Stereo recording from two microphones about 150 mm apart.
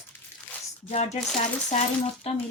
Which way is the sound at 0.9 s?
50° left (ahead or behind).